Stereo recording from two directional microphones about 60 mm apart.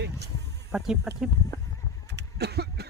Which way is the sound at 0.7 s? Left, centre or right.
Centre.